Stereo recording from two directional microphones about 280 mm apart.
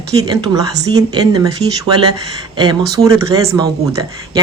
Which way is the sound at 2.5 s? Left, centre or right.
Centre.